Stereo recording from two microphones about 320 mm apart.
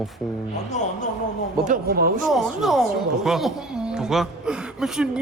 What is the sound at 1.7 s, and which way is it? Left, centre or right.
Speech, right.